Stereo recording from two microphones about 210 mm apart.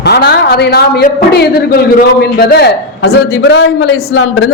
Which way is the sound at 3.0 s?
65° left (ahead or behind).